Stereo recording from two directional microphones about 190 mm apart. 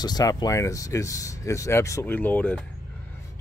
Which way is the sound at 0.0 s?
20° left (ahead or behind).